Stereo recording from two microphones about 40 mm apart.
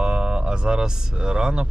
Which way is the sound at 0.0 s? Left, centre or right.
Right.